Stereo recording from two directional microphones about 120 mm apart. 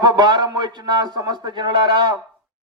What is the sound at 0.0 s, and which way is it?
A man's voice, 35° right (ahead or behind).